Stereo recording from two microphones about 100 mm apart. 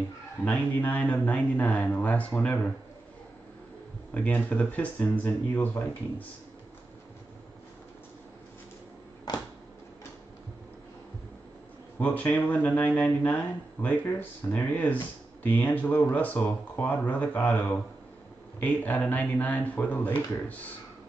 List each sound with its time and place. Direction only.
0.5 s a man's voice: 15° left (ahead or behind)
4.1 s a man's voice: 15° left (ahead or behind)
12.0 s a man's voice: 15° left (ahead or behind)